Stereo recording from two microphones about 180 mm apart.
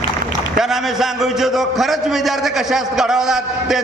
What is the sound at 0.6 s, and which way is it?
A man's voice, centre (ahead or behind).